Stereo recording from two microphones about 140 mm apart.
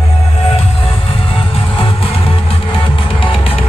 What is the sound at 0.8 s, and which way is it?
Music, 40° left (ahead or behind).